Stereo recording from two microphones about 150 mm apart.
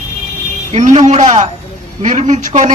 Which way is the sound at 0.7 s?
55° right (ahead or behind).